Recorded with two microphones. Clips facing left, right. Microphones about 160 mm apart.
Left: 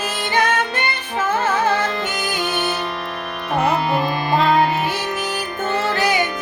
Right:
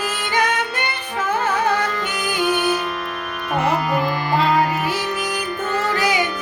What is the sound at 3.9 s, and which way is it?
Music, 25° left (ahead or behind).